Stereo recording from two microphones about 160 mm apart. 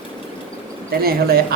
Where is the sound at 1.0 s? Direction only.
70° right (ahead or behind).